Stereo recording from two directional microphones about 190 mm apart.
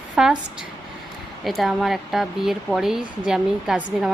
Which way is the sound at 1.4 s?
Centre (ahead or behind).